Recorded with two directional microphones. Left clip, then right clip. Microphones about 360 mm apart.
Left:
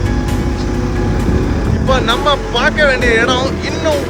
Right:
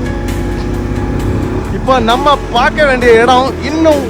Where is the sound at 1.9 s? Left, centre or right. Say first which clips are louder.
Right 4 dB; centre.